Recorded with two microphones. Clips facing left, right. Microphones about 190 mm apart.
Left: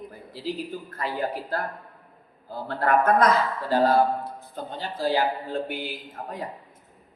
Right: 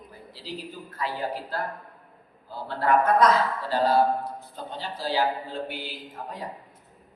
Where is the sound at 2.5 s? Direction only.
50° left (ahead or behind).